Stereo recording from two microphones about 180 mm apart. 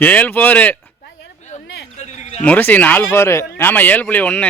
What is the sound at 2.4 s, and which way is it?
Speech, 10° left (ahead or behind).